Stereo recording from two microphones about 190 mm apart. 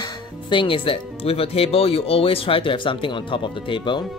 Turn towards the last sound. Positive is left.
turn(degrees=25)  # may be behind; listen again after turning